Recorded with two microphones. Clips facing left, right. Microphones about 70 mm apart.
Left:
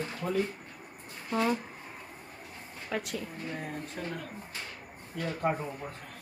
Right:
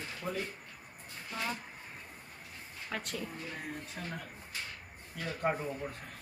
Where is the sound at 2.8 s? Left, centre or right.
Centre.